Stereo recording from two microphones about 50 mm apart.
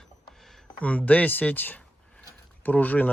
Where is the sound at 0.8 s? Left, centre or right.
Left.